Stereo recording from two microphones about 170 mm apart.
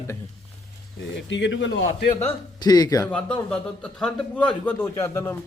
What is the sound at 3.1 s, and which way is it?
A man's voice, 5° left (ahead or behind).